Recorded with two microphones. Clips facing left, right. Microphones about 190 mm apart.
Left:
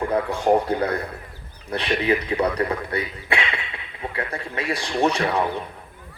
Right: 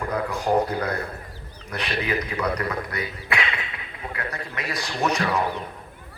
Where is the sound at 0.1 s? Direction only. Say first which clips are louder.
Left 3 dB; 30° left (ahead or behind).